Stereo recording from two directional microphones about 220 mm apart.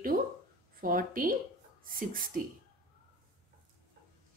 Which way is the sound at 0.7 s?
40° right (ahead or behind).